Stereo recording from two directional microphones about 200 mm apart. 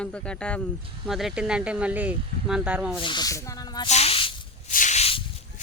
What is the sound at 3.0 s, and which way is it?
Speech, 20° left (ahead or behind).